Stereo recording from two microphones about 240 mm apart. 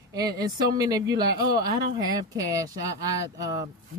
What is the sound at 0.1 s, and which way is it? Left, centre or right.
Speech, centre.